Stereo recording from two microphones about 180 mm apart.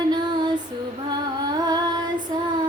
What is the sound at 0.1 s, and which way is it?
Music, 25° right (ahead or behind).